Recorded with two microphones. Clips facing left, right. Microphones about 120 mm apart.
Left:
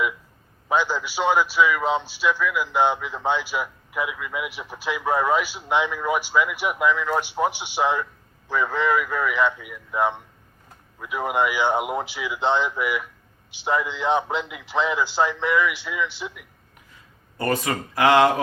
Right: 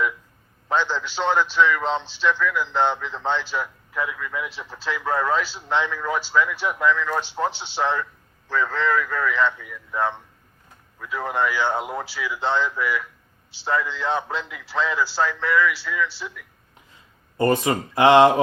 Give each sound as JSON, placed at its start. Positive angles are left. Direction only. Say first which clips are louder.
{"t": 0.7, "sound": "a man's voice", "louder": "left 1 dB", "side_deg": 10}
{"t": 16.9, "sound": "speech", "louder": "left 1 dB", "side_deg": -20}